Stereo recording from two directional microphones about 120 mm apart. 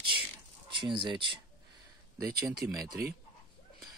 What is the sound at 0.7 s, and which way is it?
Speech, 45° right (ahead or behind).